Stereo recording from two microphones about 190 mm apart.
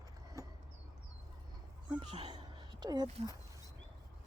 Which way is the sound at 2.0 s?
30° right (ahead or behind).